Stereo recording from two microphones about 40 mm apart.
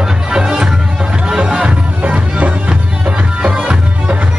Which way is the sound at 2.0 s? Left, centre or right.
Right.